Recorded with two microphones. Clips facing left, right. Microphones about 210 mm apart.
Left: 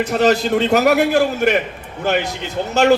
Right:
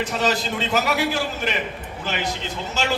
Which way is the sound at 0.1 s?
60° left (ahead or behind).